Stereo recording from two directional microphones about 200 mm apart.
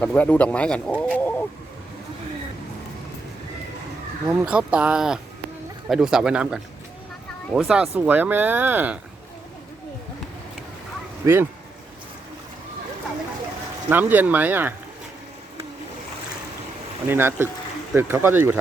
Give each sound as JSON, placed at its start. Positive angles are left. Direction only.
{"t": 0.0, "sound": "speech", "side_deg": 5}
{"t": 1.1, "sound": "a sound", "side_deg": 10}
{"t": 4.3, "sound": "speech", "side_deg": -5}
{"t": 11.2, "sound": "speech", "side_deg": -15}
{"t": 13.9, "sound": "speech", "side_deg": -10}
{"t": 17.1, "sound": "speech", "side_deg": -10}